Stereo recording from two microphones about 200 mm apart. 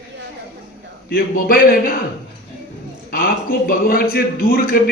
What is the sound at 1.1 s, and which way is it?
Speech, 50° left (ahead or behind).